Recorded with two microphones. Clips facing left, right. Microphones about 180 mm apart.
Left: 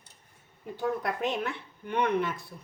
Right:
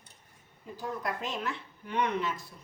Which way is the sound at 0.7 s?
60° left (ahead or behind).